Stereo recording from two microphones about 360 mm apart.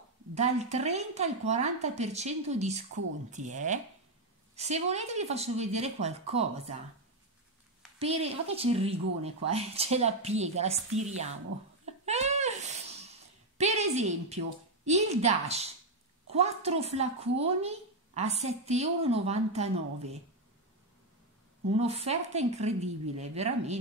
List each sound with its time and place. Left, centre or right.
0.3 s a woman's voice: centre
8.0 s a woman's voice: centre
11.8 s babbling: centre
13.6 s a woman's voice: centre
21.7 s a woman's voice: centre